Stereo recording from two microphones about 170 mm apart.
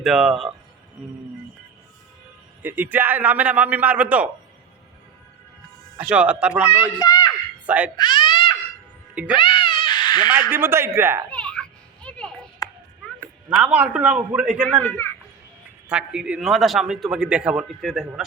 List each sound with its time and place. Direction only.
0.0 s a man's voice: centre (ahead or behind)
2.6 s a man's voice: 10° right (ahead or behind)
6.0 s a man's voice: 5° right (ahead or behind)
7.0 s a sound: 25° left (ahead or behind)
10.3 s a man's voice: 10° right (ahead or behind)
11.3 s children playing: 5° left (ahead or behind)
13.6 s a man's voice: 10° right (ahead or behind)
14.8 s a child's voice: 10° left (ahead or behind)
15.9 s a man's voice: 5° right (ahead or behind)